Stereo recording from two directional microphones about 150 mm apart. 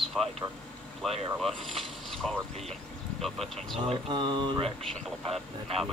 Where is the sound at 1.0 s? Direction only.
Centre (ahead or behind).